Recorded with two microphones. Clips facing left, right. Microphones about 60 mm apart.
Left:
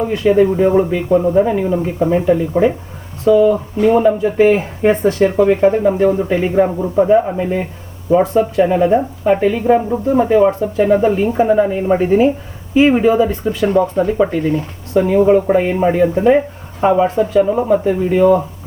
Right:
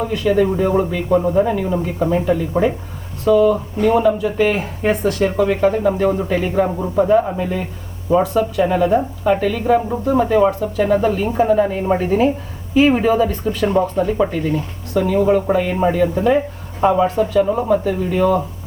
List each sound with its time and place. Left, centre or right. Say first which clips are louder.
0.0 s speech: left 4 dB; left